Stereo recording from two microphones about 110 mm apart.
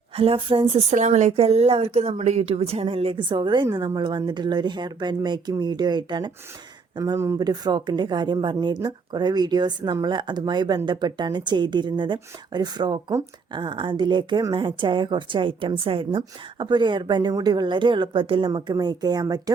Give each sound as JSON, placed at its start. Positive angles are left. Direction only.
{"t": 0.2, "sound": "a woman's voice", "side_deg": -55}
{"t": 7.0, "sound": "a woman's voice", "side_deg": -30}